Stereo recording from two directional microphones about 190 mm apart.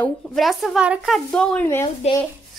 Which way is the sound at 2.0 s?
35° left (ahead or behind).